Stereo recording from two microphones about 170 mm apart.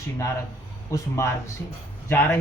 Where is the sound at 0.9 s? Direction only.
20° left (ahead or behind).